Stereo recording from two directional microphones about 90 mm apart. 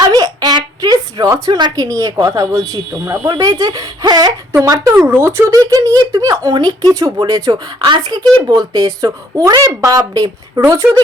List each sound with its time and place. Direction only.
0.1 s a sound: 50° right (ahead or behind)
1.5 s speech: 55° right (ahead or behind)
1.7 s speech: 40° right (ahead or behind)
4.5 s speech: 35° right (ahead or behind)
4.9 s speech: 25° right (ahead or behind)
5.5 s speech: 40° right (ahead or behind)
7.8 s a child's voice: 60° right (ahead or behind); by 10.6 s 40° right (ahead or behind)